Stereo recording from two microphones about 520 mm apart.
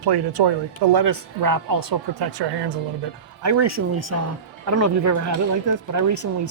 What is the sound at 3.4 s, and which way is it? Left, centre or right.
Speech, right.